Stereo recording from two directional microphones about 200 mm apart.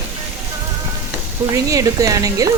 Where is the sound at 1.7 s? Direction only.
15° right (ahead or behind).